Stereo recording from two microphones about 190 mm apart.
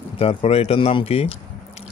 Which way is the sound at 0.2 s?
30° left (ahead or behind).